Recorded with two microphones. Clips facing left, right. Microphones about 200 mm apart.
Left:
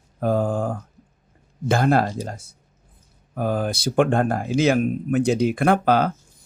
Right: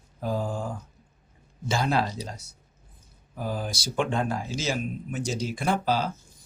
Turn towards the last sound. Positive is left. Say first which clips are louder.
# left 8 dB
turn(degrees=60)  # may be behind; listen again after turning